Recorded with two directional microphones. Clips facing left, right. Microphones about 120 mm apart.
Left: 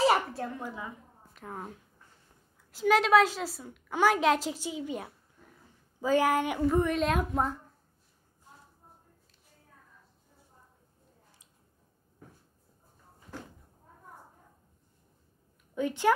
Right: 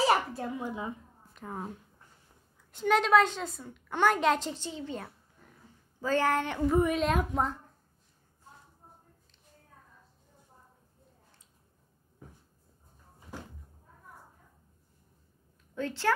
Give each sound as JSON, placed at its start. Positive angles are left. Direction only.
{"t": 0.0, "sound": "a woman's voice", "side_deg": 0}
{"t": 0.6, "sound": "a woman's voice", "side_deg": -20}
{"t": 1.3, "sound": "a woman's voice", "side_deg": 0}
{"t": 6.7, "sound": "a woman's voice", "side_deg": -5}
{"t": 15.7, "sound": "a woman's voice", "side_deg": 15}